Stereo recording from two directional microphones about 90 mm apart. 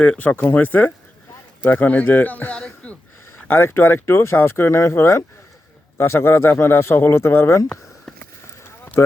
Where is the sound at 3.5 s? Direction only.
25° left (ahead or behind).